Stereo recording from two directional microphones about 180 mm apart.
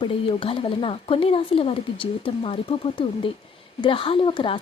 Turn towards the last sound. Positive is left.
turn(degrees=30)  # may be behind; listen again after turning